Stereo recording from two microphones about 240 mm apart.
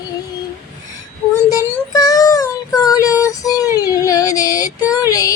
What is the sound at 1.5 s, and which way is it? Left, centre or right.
Child singing, centre.